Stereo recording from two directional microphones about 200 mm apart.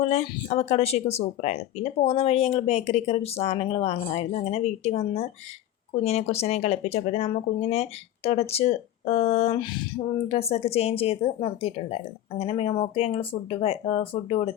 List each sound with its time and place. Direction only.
0.0 s speech: 30° left (ahead or behind)